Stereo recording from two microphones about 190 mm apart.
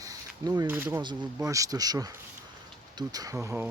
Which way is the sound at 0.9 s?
25° right (ahead or behind).